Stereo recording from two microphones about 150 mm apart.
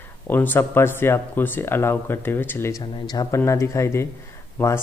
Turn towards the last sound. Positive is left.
turn(degrees=10)  # may be behind; listen again after turning